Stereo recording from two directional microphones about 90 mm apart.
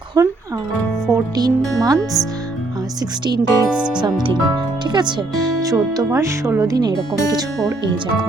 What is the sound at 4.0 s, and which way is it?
Speech, 55° right (ahead or behind).